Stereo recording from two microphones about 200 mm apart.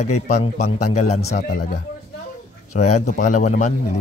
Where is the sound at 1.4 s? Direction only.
45° left (ahead or behind).